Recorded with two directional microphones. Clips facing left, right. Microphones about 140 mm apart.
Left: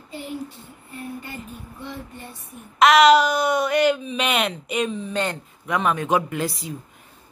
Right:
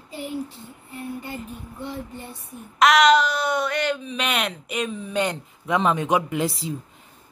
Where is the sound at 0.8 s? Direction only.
25° right (ahead or behind).